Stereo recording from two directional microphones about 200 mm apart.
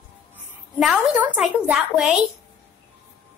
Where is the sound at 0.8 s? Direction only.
5° right (ahead or behind).